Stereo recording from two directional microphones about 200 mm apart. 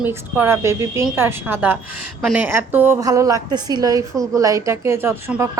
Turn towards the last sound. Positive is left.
turn(degrees=-10)  # may be behind; listen again after turning